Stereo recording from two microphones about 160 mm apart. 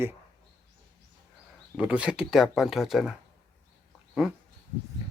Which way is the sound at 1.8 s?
5° right (ahead or behind).